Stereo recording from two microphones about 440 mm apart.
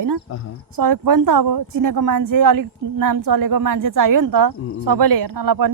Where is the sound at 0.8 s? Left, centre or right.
Right.